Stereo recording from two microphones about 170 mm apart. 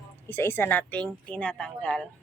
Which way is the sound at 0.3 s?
15° left (ahead or behind).